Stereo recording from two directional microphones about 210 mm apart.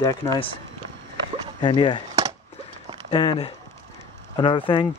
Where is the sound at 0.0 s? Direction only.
15° left (ahead or behind).